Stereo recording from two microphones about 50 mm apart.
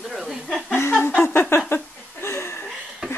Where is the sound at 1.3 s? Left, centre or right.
Left.